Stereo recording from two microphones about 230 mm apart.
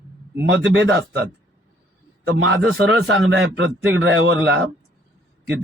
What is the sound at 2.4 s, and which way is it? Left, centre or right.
A man's voice, right.